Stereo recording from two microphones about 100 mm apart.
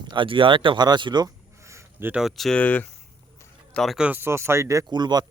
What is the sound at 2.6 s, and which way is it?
Speech, 15° left (ahead or behind).